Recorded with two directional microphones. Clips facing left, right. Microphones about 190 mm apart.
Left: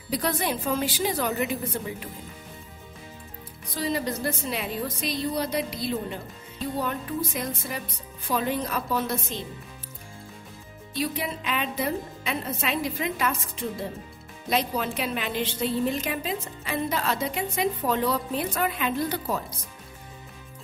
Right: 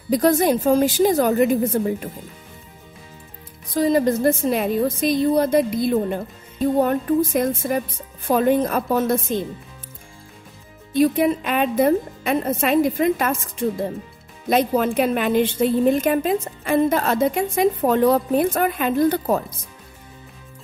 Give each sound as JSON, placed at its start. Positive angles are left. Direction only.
{"t": 0.1, "sound": "a woman's voice", "side_deg": -45}
{"t": 3.7, "sound": "a woman's voice", "side_deg": -45}
{"t": 10.9, "sound": "a woman's voice", "side_deg": -50}
{"t": 14.5, "sound": "a woman's voice", "side_deg": -50}